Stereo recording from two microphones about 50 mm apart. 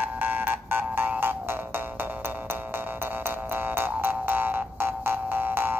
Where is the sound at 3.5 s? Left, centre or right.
Right.